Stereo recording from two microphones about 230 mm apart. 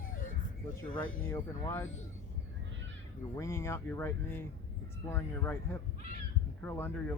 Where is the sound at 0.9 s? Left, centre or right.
Centre.